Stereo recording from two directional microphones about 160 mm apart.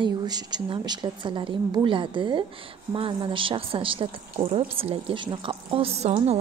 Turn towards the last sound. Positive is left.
turn(degrees=-40)  # may be behind; listen again after turning